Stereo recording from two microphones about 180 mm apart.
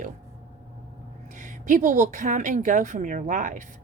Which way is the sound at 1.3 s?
45° right (ahead or behind).